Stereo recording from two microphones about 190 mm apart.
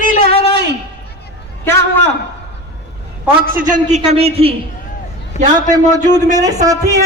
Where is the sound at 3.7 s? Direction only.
35° right (ahead or behind).